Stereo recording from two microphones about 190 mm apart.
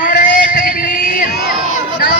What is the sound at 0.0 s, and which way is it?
Music, 45° left (ahead or behind).